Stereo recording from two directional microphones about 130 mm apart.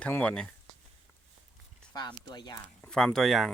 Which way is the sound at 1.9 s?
35° left (ahead or behind).